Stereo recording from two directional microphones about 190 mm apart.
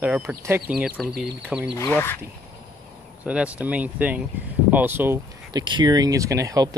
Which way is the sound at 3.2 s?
5° right (ahead or behind).